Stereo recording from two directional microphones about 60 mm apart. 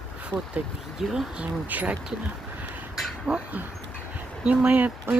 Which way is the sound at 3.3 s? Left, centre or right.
Centre.